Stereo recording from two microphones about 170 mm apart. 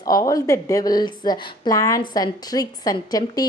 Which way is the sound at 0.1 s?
20° left (ahead or behind).